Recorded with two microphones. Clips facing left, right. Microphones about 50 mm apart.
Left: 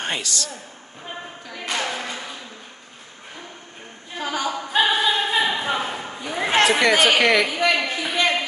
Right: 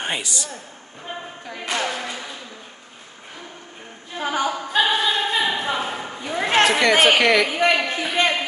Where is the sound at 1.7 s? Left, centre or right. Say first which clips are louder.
Right 1 dB; centre.